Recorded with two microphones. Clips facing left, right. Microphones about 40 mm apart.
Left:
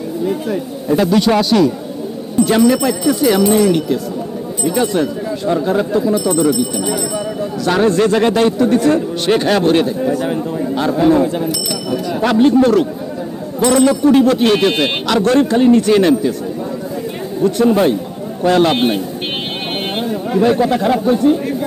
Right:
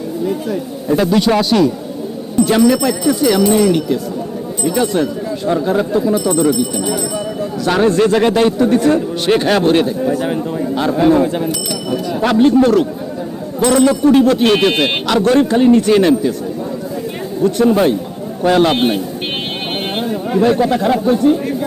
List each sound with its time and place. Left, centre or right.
0.3 s speech: centre
0.9 s a man's voice: centre
12.0 s speech: centre
14.6 s a man's voice: centre
17.4 s speech: centre
18.4 s a man's voice: centre
18.8 s vehicle: centre
20.4 s speech: centre